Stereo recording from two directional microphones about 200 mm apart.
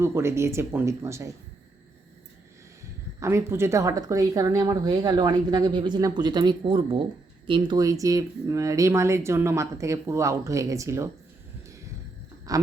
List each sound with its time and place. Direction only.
0.0 s speech: 10° right (ahead or behind)
3.2 s speech: 15° right (ahead or behind)
12.5 s speech: 15° right (ahead or behind)